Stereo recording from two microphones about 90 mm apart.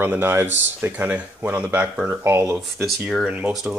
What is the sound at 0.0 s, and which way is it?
Speech, 25° right (ahead or behind).